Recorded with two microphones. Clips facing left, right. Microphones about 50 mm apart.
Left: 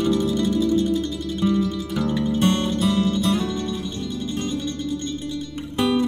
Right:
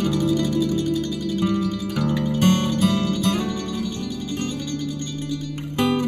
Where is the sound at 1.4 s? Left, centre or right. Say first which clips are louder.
Left 3 dB; right.